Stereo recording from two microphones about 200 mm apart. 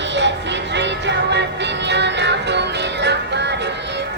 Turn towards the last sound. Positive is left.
turn(degrees=-60)  # may be behind; listen again after turning